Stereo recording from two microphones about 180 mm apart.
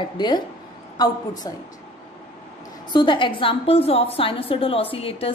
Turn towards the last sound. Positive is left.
turn(degrees=30)  # may be behind; listen again after turning